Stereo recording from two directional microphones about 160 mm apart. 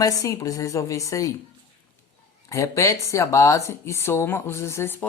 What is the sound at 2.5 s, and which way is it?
Speech, 20° left (ahead or behind).